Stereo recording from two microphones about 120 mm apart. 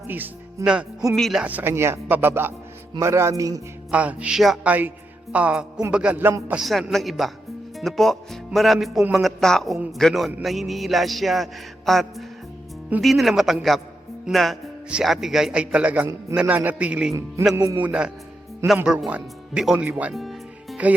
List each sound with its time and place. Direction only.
0.1 s a man's voice: 10° right (ahead or behind)
1.5 s a man's voice: 15° right (ahead or behind)
3.9 s speech: 10° right (ahead or behind)
6.5 s a man's voice: centre (ahead or behind)
17.5 s a man's voice: 25° right (ahead or behind)
17.7 s speech: 10° right (ahead or behind)
20.1 s music: centre (ahead or behind)